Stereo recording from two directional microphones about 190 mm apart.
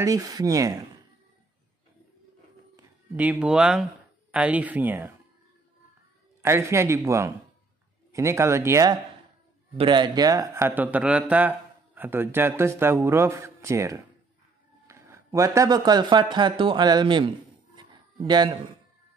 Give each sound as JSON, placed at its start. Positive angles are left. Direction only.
{"t": 0.0, "sound": "speech", "side_deg": -20}
{"t": 3.2, "sound": "speech", "side_deg": -5}
{"t": 6.4, "sound": "speech", "side_deg": -15}
{"t": 17.7, "sound": "a sound", "side_deg": -25}